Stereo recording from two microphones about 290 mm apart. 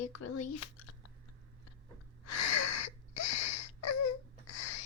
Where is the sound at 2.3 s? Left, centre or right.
Left.